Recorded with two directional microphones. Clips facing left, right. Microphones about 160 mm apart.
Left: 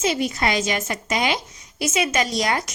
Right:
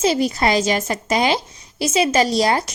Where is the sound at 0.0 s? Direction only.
35° right (ahead or behind).